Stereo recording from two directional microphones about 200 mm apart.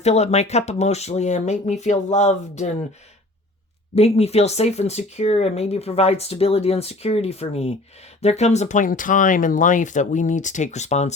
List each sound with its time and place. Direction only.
0.0 s speech: 35° left (ahead or behind)
3.9 s speech: 30° left (ahead or behind)